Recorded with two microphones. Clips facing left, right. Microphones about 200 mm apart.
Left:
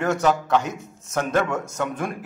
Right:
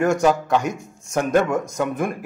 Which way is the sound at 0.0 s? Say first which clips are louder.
Right 3 dB; 10° right (ahead or behind).